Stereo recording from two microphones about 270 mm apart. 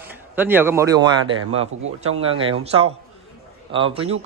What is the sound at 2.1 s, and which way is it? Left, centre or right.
Speech, right.